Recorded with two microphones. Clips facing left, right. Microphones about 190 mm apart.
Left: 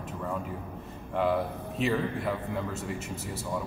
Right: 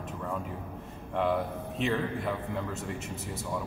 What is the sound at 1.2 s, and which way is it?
Speech, centre (ahead or behind).